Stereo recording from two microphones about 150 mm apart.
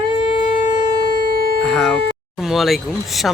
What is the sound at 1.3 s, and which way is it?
Music, 90° right.